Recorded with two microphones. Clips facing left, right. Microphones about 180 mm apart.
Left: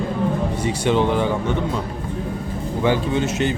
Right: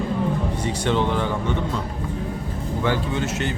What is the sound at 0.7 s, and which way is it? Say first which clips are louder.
Speech: left 4 dB; 15° left (ahead or behind).